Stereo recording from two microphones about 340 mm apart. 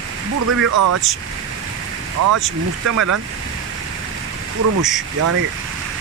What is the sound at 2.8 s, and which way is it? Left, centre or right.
Speech, right.